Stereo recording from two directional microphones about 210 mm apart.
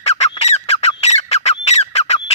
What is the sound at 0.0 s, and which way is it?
Squawk, 30° left (ahead or behind).